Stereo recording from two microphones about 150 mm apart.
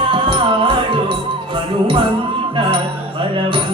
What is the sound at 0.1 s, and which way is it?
Music, 35° right (ahead or behind).